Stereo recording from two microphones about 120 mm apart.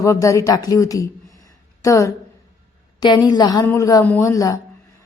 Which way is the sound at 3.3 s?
35° left (ahead or behind).